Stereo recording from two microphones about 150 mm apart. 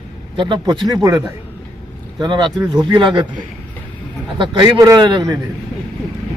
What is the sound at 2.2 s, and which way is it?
Speech, 30° right (ahead or behind).